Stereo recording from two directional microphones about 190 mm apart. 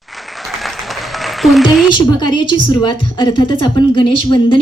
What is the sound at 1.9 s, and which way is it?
A woman's voice, 25° left (ahead or behind).